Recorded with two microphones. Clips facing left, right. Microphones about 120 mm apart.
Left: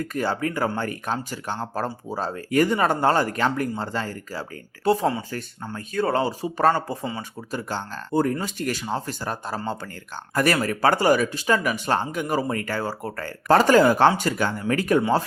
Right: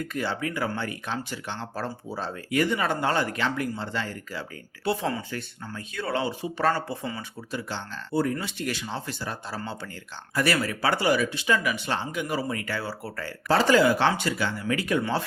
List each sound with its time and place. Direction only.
0.0 s speech: 45° left (ahead or behind)